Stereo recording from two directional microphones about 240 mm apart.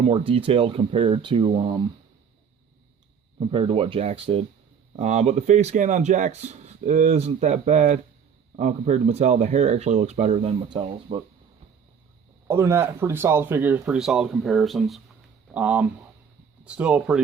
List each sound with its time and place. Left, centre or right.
0.0 s speech: right
3.4 s speech: right
12.5 s speech: centre